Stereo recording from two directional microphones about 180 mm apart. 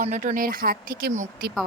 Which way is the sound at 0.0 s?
40° right (ahead or behind).